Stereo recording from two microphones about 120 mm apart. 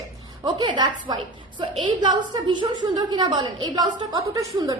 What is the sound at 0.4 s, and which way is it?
A woman's voice, 40° right (ahead or behind).